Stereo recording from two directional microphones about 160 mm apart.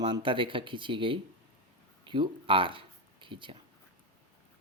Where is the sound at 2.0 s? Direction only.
30° right (ahead or behind).